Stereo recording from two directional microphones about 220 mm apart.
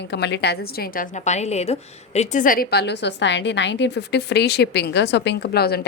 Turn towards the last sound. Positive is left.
turn(degrees=45)  # may be behind; listen again after turning